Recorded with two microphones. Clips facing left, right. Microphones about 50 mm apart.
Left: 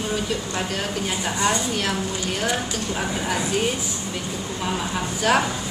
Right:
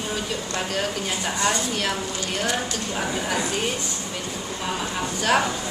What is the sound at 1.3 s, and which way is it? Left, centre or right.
Speech, centre.